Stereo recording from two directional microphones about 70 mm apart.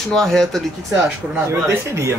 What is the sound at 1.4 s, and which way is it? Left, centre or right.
Speech, right.